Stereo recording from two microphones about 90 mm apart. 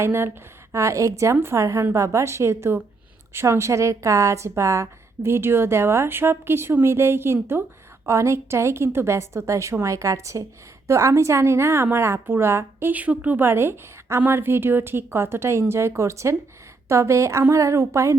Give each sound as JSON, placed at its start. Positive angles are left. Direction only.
{"t": 0.0, "sound": "a woman's voice", "side_deg": -25}